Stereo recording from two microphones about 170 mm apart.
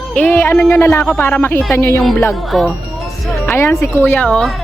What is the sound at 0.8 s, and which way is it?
Speech, 15° left (ahead or behind).